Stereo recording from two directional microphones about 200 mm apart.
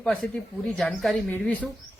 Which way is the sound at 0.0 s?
5° left (ahead or behind).